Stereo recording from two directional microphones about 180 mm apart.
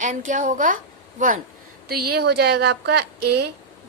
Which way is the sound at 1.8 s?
60° right (ahead or behind).